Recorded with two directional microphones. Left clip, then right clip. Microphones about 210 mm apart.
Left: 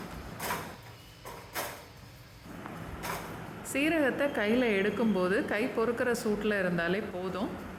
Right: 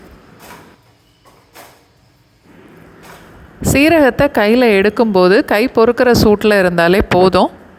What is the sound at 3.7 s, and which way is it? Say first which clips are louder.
Speech: right 18 dB; 40° right (ahead or behind).